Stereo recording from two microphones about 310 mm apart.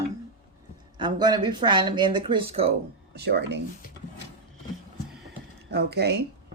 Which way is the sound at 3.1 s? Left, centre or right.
Right.